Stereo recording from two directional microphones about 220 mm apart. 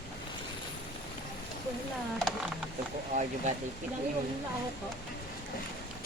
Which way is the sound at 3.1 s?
35° right (ahead or behind).